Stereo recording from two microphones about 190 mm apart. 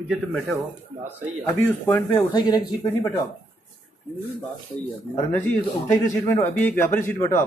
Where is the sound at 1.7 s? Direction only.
10° left (ahead or behind).